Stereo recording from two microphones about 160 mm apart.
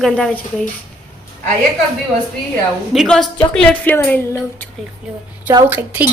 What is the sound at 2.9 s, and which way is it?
Speech, centre (ahead or behind).